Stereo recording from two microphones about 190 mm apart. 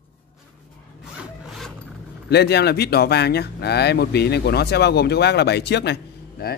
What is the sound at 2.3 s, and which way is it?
Speech, 60° left (ahead or behind).